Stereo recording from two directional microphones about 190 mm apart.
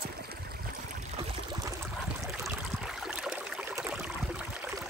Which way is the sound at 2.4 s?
Centre (ahead or behind).